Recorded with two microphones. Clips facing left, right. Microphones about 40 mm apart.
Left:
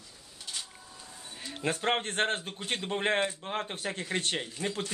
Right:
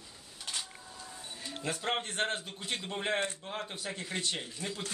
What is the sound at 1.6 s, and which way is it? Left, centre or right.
Speech, left.